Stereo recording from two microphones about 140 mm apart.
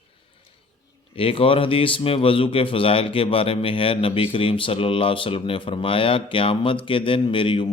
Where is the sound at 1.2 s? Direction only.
40° left (ahead or behind).